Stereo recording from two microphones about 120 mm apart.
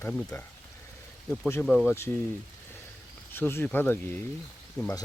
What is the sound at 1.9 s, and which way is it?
Speech, 20° left (ahead or behind).